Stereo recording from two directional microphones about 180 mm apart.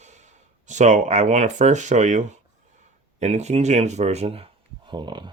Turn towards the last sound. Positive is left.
turn(degrees=-25)  # may be behind; listen again after turning